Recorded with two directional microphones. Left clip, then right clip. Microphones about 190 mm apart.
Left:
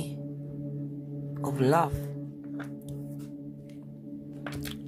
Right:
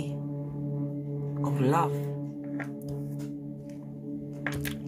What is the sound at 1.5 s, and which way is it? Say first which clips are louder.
Speech: left 2 dB; 30° left (ahead or behind).